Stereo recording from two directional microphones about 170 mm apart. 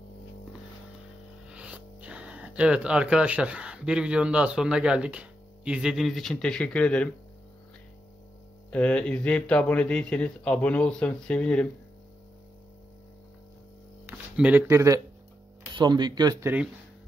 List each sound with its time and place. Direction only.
1.5 s speech: 5° right (ahead or behind)
8.6 s speech: 5° left (ahead or behind)
14.0 s speech: 10° right (ahead or behind)